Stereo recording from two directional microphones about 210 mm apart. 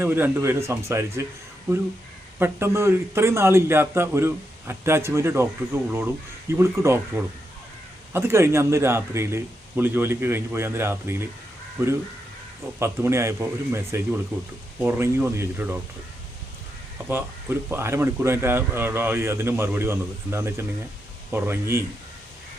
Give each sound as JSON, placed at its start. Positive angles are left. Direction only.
{"t": 0.0, "sound": "a man's voice", "side_deg": -10}
{"t": 2.4, "sound": "a man's voice", "side_deg": -10}
{"t": 17.1, "sound": "a man's voice", "side_deg": -10}